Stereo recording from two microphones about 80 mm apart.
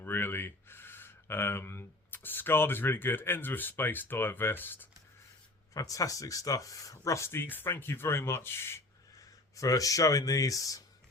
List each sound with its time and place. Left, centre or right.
0.0 s speech: left
5.7 s speech: left
9.1 s speech: left